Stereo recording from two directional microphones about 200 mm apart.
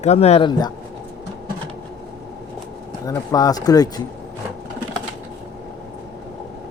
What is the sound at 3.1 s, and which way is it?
Speech, 20° left (ahead or behind).